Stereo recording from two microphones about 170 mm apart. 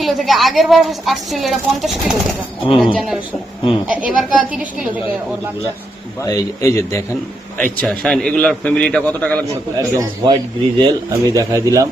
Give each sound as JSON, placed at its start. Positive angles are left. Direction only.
{"t": 0.0, "sound": "a woman's voice", "side_deg": 0}
{"t": 6.2, "sound": "speech", "side_deg": 20}
{"t": 7.6, "sound": "a man's voice", "side_deg": 5}
{"t": 9.7, "sound": "speech", "side_deg": -20}